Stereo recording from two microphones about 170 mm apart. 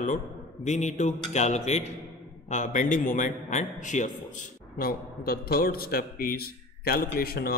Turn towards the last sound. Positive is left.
turn(degrees=65)  # may be behind; listen again after turning